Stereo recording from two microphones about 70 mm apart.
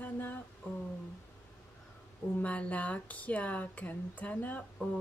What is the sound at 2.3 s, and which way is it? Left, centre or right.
Speech, centre.